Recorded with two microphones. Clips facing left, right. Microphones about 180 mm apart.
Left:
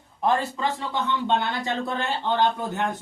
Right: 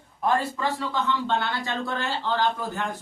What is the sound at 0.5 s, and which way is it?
Speech, 20° left (ahead or behind).